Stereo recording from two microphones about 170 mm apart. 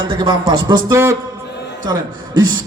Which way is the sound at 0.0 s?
30° right (ahead or behind).